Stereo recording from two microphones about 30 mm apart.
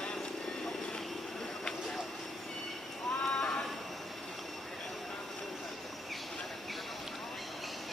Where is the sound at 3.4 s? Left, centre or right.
Left.